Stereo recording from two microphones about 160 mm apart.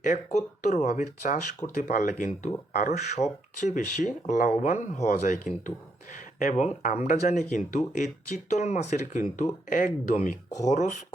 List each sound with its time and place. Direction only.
0.3 s speech: 50° left (ahead or behind)